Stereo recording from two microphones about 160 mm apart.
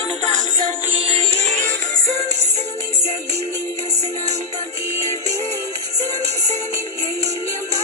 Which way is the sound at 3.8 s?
45° right (ahead or behind).